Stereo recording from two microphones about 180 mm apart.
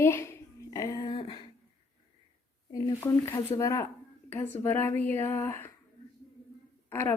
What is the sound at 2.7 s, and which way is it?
A woman's voice, 15° left (ahead or behind).